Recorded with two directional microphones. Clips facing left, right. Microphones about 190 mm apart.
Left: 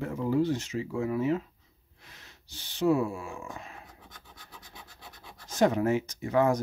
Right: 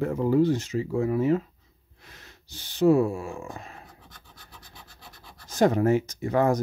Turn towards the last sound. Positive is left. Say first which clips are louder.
# right 2 dB
turn(degrees=-40)  # may be behind; listen again after turning